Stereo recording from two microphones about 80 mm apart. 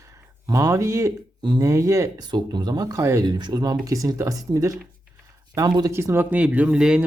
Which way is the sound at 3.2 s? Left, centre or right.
Right.